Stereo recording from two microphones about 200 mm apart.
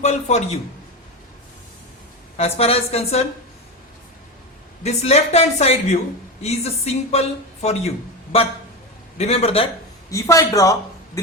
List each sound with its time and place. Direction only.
0.0 s a man's voice: 35° left (ahead or behind)
2.4 s a man's voice: 30° left (ahead or behind)
4.8 s a man's voice: 30° left (ahead or behind)
10.1 s a man's voice: 15° left (ahead or behind)